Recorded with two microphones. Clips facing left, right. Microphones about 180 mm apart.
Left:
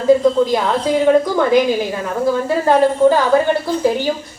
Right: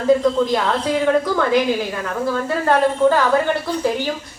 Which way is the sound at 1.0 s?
15° left (ahead or behind).